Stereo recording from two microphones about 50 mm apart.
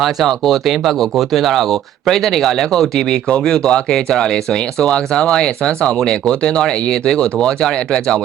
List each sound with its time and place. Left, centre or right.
0.0 s speech: centre